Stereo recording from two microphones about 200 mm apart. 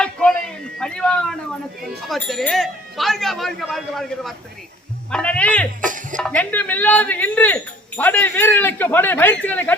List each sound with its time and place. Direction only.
0.0 s a sound: 5° left (ahead or behind)
2.0 s speech: centre (ahead or behind)
5.8 s music: 40° right (ahead or behind)
6.1 s speech: 5° left (ahead or behind)